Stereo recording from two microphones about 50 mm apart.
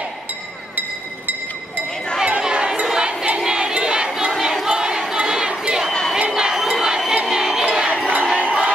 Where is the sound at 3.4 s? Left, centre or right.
Centre.